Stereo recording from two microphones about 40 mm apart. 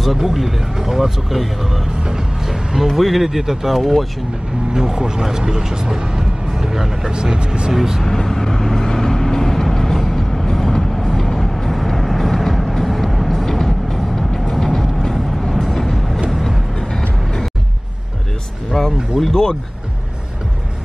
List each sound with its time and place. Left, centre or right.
0.2 s speech: centre
2.0 s speech: centre
4.7 s speech: centre
7.1 s speech: right
7.7 s speech: centre
8.0 s vehicle: centre
16.7 s vehicle: centre
18.8 s music: centre